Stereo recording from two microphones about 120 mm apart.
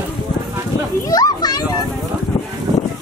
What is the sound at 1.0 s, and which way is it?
Speech, 30° left (ahead or behind).